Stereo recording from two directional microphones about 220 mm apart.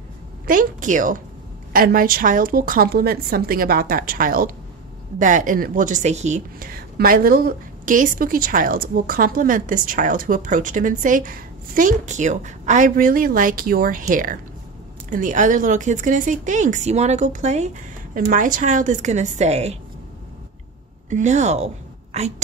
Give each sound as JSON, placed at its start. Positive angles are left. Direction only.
{"t": 0.5, "sound": "a woman's voice", "side_deg": -35}
{"t": 21.1, "sound": "a woman's voice", "side_deg": -30}